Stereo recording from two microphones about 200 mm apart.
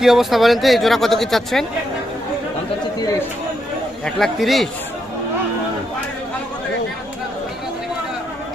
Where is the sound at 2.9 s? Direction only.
15° left (ahead or behind).